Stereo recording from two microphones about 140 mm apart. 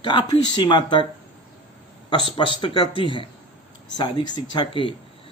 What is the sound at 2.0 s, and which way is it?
Speech, 35° left (ahead or behind).